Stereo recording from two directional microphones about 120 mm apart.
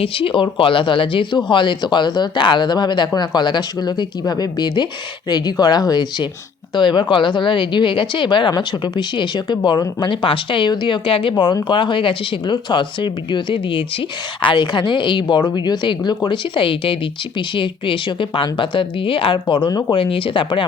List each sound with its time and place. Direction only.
0.0 s a woman's voice: 50° left (ahead or behind)